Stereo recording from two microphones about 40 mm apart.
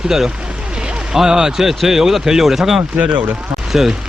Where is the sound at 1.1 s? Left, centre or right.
Centre.